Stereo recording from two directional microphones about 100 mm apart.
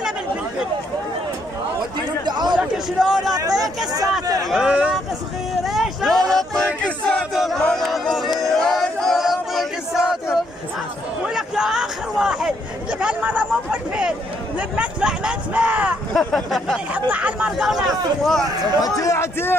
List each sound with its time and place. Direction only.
2.2 s chatter: 45° right (ahead or behind)
2.6 s a man's voice: 5° right (ahead or behind)
3.3 s speech: 35° right (ahead or behind)
4.5 s speech: 5° right (ahead or behind)
5.6 s a sound: centre (ahead or behind)
7.3 s crowd: centre (ahead or behind)
7.6 s choir: 5° left (ahead or behind)
11.2 s a sound: 5° right (ahead or behind)
13.0 s speech: 15° right (ahead or behind)
16.1 s a sound: 5° left (ahead or behind)
17.1 s speech: 15° right (ahead or behind)
17.6 s a sound: centre (ahead or behind)
18.4 s speech: 40° right (ahead or behind)
18.8 s speech: 35° left (ahead or behind)